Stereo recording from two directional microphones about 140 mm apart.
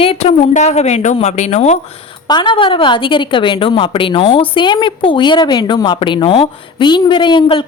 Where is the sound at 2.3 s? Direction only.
35° left (ahead or behind).